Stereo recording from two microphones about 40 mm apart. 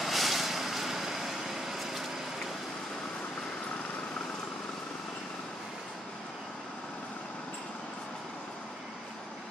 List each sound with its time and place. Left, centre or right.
0.0 s vehicle: centre